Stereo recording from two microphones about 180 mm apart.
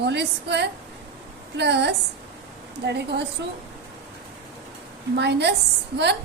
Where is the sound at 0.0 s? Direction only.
70° right (ahead or behind).